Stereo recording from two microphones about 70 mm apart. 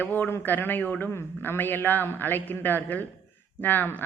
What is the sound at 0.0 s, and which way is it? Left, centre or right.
A woman's voice, left.